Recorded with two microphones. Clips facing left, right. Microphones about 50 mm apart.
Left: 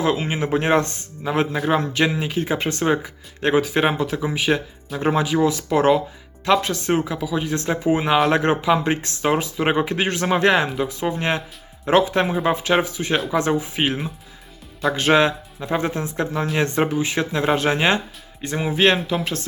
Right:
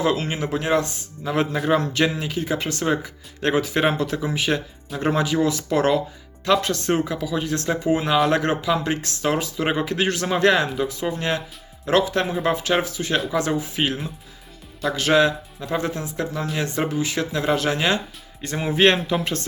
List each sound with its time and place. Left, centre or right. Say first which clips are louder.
0.0 s speech: left 1 dB; centre
0.3 s speech: left 3 dB; left
1.2 s speech: left 1 dB; centre
18.4 s speech: even; centre